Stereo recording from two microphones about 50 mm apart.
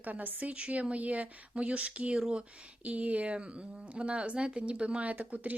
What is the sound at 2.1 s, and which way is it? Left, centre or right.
Speech, centre.